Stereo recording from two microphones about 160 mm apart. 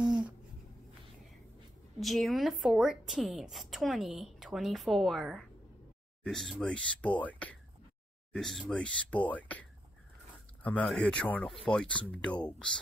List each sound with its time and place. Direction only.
2.0 s a woman's voice: centre (ahead or behind)